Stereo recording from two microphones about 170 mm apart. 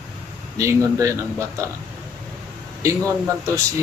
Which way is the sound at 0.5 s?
20° right (ahead or behind).